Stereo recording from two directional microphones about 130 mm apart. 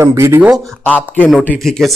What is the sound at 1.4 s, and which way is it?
Speech, centre (ahead or behind).